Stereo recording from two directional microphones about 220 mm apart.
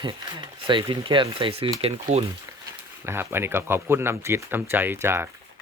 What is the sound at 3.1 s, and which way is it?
Speech, 10° right (ahead or behind).